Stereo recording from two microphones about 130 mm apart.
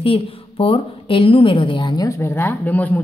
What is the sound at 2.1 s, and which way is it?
Speech, 20° left (ahead or behind).